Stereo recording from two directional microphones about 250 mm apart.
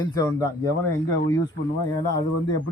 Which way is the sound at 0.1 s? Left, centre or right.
Centre.